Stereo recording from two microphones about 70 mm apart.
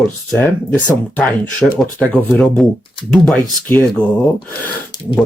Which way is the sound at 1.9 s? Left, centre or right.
Centre.